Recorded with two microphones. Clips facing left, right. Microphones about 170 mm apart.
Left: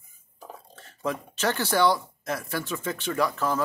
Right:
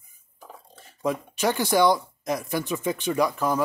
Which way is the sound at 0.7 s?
10° right (ahead or behind).